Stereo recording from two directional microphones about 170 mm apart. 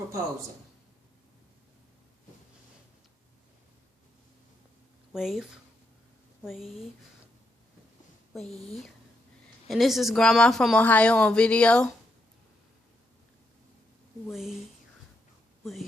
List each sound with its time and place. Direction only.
5.1 s speech: 5° right (ahead or behind)
8.4 s speech: 35° left (ahead or behind)
9.6 s speech: centre (ahead or behind)
14.3 s speech: centre (ahead or behind)